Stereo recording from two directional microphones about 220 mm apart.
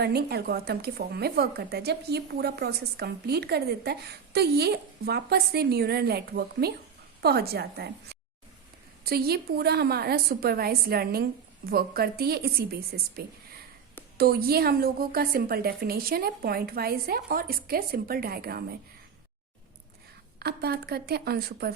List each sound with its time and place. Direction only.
0.0 s speech: 45° right (ahead or behind)
9.0 s speech: 45° right (ahead or behind)
14.2 s speech: 45° right (ahead or behind)
20.4 s speech: 45° right (ahead or behind)